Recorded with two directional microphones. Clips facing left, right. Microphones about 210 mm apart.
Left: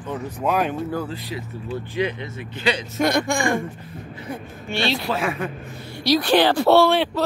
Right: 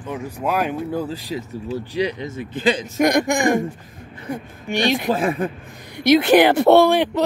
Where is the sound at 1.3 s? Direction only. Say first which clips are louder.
Right 3 dB; 40° right (ahead or behind).